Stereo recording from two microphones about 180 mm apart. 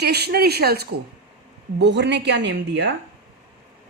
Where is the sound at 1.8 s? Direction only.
75° right (ahead or behind).